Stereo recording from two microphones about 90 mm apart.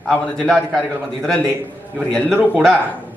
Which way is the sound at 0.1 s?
5° left (ahead or behind).